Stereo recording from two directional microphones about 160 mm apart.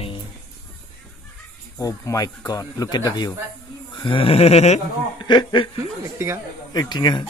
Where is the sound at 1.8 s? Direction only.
20° left (ahead or behind); by 4.8 s 40° left (ahead or behind).